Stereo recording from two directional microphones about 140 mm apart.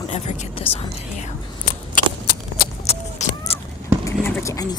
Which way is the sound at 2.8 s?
50° left (ahead or behind).